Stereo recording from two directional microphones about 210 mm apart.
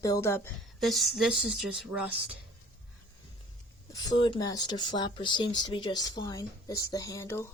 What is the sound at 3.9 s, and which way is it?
Speech, 20° left (ahead or behind).